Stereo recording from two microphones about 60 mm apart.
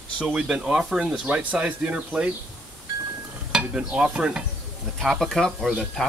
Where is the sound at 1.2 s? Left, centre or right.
Right.